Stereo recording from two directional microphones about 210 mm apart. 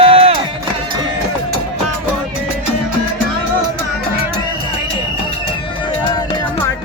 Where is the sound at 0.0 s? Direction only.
25° right (ahead or behind).